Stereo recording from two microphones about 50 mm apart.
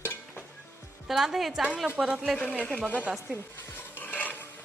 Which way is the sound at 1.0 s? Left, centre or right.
Centre.